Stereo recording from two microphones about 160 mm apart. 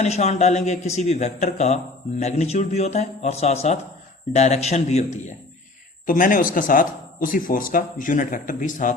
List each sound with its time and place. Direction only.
0.0 s a man's voice: 45° left (ahead or behind)
6.1 s speech: 60° left (ahead or behind)